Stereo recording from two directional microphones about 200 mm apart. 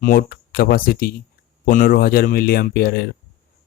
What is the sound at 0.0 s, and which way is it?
Speech, 45° left (ahead or behind).